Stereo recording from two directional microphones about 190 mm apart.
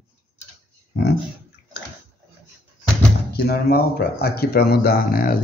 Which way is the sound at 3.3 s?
55° left (ahead or behind).